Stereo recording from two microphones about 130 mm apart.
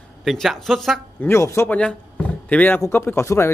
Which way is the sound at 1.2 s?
20° left (ahead or behind).